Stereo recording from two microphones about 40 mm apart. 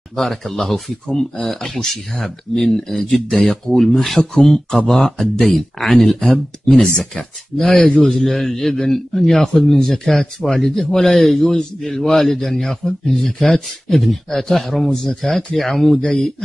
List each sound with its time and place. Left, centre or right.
0.1 s a man's voice: centre
8.2 s speech: centre